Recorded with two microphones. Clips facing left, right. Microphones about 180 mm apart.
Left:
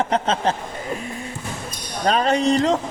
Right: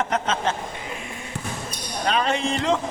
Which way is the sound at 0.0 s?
30° left (ahead or behind).